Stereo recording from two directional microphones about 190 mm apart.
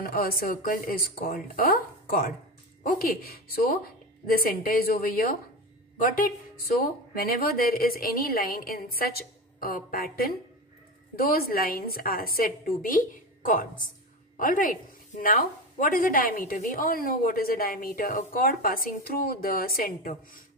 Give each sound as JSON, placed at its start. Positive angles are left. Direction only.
{"t": 0.0, "sound": "a woman's voice", "side_deg": 50}